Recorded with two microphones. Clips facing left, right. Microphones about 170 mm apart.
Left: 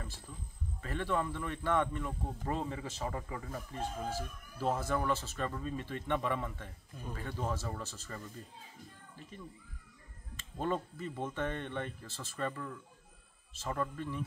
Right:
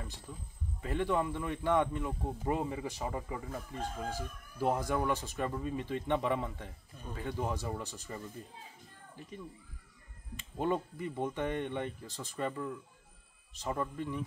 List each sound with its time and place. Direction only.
0.8 s speech: 15° right (ahead or behind)
10.3 s speech: 15° right (ahead or behind)